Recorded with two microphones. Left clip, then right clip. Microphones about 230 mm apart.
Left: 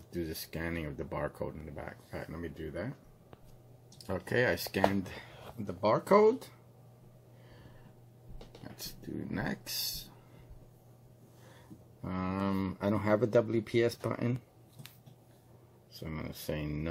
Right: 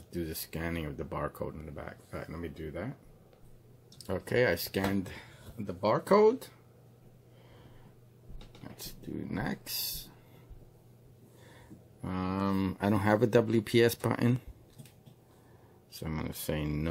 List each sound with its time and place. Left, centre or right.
0.1 s speech: centre
4.0 s speech: centre
8.6 s speech: centre
12.0 s speech: centre
12.9 s speech: right
15.9 s speech: right